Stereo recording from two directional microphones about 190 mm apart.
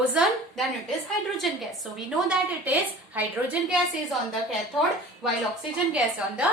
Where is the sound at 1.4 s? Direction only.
Centre (ahead or behind).